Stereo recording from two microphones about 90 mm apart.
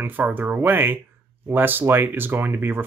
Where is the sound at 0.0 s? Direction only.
20° right (ahead or behind).